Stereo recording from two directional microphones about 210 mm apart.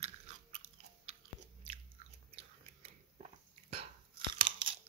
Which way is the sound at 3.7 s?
25° right (ahead or behind).